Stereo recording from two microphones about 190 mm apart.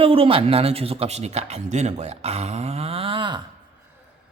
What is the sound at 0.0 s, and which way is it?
Speech, 30° right (ahead or behind).